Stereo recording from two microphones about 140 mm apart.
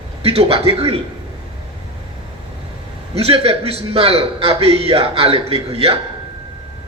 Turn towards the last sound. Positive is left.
turn(degrees=-45)  # may be behind; listen again after turning